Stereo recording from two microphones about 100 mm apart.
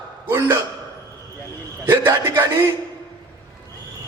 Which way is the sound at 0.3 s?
25° right (ahead or behind).